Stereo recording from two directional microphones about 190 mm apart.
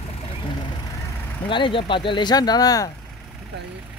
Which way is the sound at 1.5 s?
25° left (ahead or behind).